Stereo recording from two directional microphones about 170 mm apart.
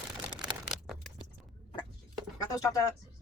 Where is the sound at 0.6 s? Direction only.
Centre (ahead or behind).